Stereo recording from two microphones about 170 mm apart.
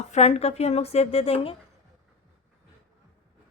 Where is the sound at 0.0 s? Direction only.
40° left (ahead or behind).